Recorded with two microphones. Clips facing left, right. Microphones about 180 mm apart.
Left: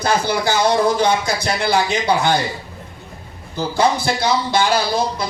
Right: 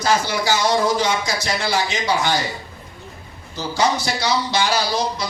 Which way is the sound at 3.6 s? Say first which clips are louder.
Left 3 dB; 55° left (ahead or behind).